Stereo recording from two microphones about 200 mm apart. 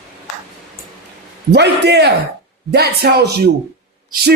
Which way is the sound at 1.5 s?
55° right (ahead or behind).